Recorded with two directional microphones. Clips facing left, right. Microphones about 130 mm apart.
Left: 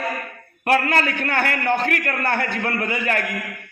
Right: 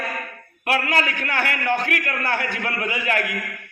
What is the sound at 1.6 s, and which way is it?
A man's voice, 30° left (ahead or behind).